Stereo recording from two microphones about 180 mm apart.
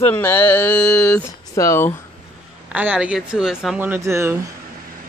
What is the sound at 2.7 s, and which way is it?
Speech, 5° right (ahead or behind).